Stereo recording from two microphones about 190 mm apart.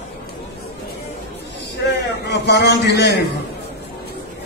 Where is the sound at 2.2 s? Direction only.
65° left (ahead or behind).